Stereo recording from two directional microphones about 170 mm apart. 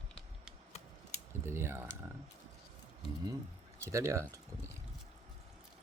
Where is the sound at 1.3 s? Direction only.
15° right (ahead or behind).